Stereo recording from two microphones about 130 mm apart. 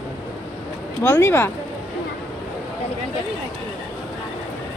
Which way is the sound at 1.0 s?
15° left (ahead or behind).